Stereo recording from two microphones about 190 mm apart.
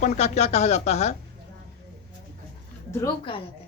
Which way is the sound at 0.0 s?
35° left (ahead or behind).